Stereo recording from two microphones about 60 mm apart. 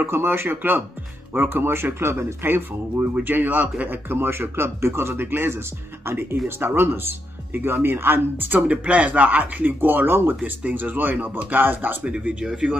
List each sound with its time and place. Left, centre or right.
0.0 s speech: right
12.0 s speech: centre